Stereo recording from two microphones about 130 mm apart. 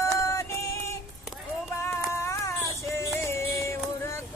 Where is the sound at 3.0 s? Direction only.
20° left (ahead or behind).